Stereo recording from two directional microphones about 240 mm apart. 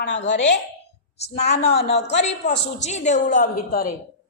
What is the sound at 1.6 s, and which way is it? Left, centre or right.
A woman's voice, left.